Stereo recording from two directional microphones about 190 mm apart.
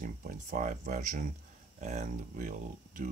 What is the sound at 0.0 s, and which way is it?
Speech, 45° right (ahead or behind).